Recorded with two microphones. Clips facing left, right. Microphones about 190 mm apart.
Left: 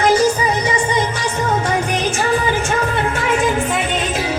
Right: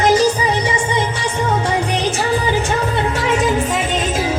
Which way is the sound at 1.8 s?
35° right (ahead or behind).